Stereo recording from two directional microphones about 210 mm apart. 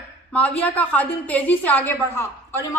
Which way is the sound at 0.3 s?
5° left (ahead or behind).